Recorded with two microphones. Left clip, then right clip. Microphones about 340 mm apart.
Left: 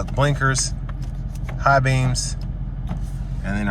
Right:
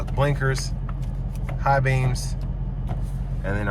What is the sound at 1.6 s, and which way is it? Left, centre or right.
Speech, centre.